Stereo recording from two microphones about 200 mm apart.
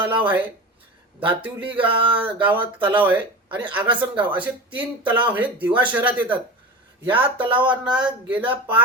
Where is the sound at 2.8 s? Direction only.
10° right (ahead or behind).